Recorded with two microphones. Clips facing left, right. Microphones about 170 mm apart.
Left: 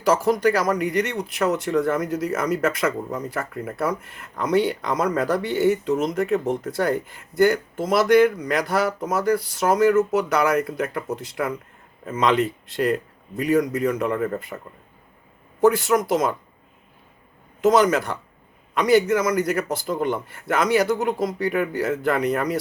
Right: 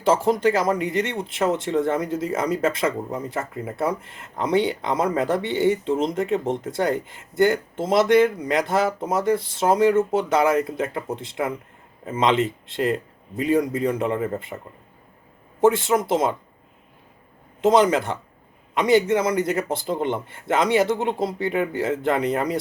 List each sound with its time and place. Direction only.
0.0 s speech: 25° right (ahead or behind)
15.6 s speech: 25° right (ahead or behind)
17.6 s speech: 25° right (ahead or behind)